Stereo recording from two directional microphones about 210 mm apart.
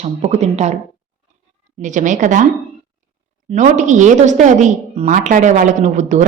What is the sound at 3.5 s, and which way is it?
A woman's voice, 35° right (ahead or behind).